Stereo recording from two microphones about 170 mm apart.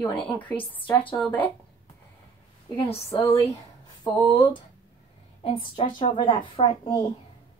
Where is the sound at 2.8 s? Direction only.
30° left (ahead or behind).